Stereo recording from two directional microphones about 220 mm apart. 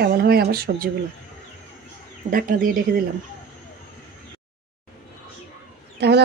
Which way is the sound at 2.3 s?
40° right (ahead or behind).